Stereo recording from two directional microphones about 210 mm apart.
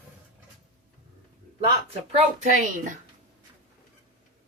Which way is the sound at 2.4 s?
35° right (ahead or behind).